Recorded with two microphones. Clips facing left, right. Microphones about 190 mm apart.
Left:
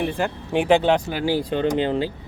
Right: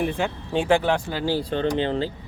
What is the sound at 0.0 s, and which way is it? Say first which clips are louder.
Speech: left 1 dB; centre (ahead or behind).